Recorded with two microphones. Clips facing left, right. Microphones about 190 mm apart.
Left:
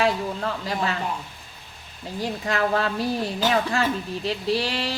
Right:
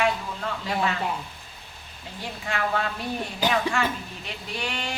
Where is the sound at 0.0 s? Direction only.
35° left (ahead or behind).